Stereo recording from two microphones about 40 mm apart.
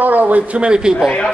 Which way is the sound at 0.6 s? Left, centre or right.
Right.